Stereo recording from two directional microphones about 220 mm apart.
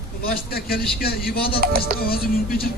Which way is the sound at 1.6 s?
40° right (ahead or behind).